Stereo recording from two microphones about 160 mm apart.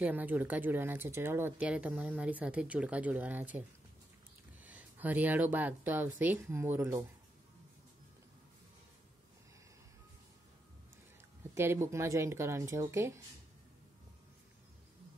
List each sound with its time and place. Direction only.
0.0 s speech: 10° right (ahead or behind)
4.6 s speech: 10° right (ahead or behind)
11.5 s speech: 15° right (ahead or behind)